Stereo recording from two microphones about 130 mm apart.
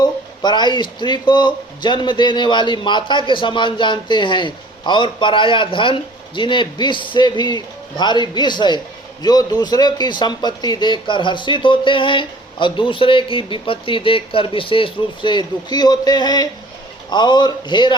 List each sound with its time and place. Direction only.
0.0 s a man's voice: 35° left (ahead or behind)